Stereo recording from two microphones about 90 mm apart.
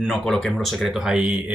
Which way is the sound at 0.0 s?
Centre (ahead or behind).